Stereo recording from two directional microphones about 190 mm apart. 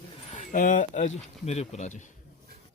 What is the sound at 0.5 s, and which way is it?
Speech, 45° left (ahead or behind).